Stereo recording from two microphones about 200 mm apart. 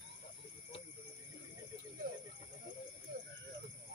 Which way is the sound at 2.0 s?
50° right (ahead or behind).